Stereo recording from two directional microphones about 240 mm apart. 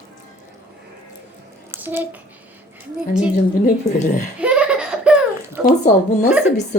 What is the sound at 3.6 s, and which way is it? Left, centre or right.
Speech, left.